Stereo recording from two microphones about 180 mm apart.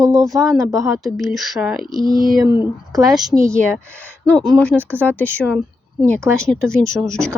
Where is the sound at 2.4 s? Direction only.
25° left (ahead or behind).